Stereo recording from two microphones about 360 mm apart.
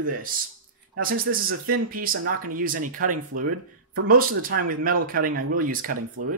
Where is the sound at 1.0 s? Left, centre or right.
Right.